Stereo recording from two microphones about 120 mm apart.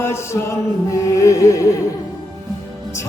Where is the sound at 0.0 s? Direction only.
20° left (ahead or behind).